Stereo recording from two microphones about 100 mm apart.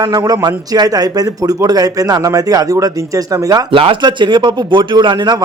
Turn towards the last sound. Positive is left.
turn(degrees=-45)  # may be behind; listen again after turning